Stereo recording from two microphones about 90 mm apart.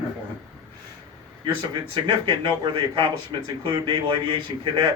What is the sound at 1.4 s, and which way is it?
A man's voice, 60° right (ahead or behind).